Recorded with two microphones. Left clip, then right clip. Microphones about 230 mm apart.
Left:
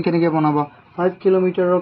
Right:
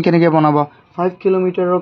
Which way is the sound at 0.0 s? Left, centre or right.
Right.